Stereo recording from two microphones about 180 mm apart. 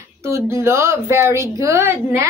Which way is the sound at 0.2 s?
15° right (ahead or behind).